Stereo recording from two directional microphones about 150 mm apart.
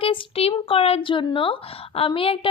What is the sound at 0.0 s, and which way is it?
A woman's voice, 40° left (ahead or behind).